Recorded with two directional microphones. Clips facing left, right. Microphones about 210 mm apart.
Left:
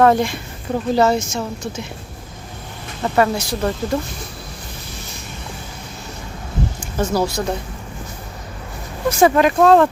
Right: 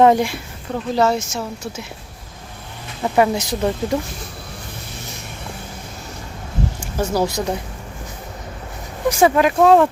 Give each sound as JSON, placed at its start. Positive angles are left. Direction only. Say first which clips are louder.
{"t": 0.0, "sound": "speech", "louder": "right 1 dB", "side_deg": -15}
{"t": 0.9, "sound": "a woman's voice", "louder": "left 1 dB", "side_deg": 0}
{"t": 3.0, "sound": "speech", "louder": "right 1 dB", "side_deg": -15}
{"t": 6.7, "sound": "speech", "louder": "left 1 dB", "side_deg": -10}
{"t": 9.0, "sound": "speech", "louder": "left 1 dB", "side_deg": -5}